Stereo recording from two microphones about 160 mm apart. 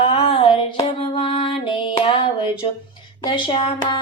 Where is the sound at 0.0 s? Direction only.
35° left (ahead or behind).